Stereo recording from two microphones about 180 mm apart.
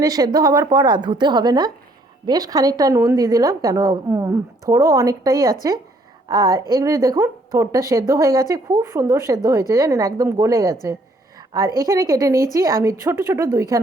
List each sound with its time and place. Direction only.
0.0 s a woman's voice: 20° right (ahead or behind)